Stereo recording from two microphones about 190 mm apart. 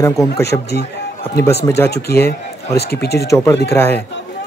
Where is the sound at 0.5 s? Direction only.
20° left (ahead or behind).